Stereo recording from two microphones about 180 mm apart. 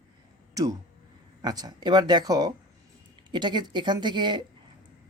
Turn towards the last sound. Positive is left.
turn(degrees=-25)  # may be behind; listen again after turning